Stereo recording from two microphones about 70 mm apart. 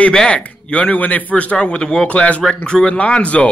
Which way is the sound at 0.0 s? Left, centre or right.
Centre.